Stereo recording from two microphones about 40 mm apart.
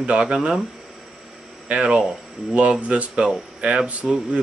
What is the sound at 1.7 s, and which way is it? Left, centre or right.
Speech, right.